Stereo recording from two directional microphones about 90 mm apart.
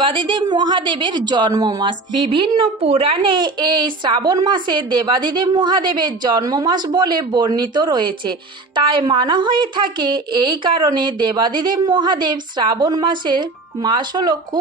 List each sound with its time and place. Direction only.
0.0 s a woman's voice: 60° right (ahead or behind)
2.2 s a woman's voice: 70° right (ahead or behind); by 14.6 s 50° right (ahead or behind)